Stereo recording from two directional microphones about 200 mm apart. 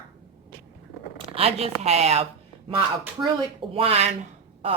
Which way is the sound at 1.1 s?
30° right (ahead or behind).